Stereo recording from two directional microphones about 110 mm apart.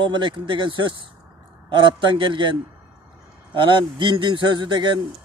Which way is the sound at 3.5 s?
50° right (ahead or behind).